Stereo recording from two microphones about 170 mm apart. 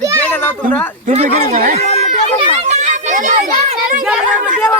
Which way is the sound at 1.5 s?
50° right (ahead or behind).